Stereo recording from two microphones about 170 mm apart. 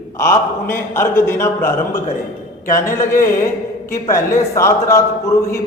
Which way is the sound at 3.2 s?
15° left (ahead or behind).